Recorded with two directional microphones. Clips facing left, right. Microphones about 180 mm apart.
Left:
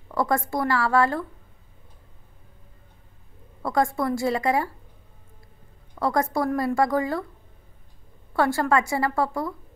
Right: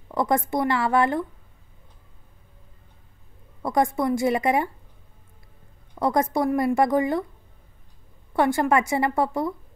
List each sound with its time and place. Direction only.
0.1 s speech: 20° right (ahead or behind)
3.6 s speech: 20° right (ahead or behind)
5.9 s speech: 20° right (ahead or behind)
8.3 s speech: 20° right (ahead or behind)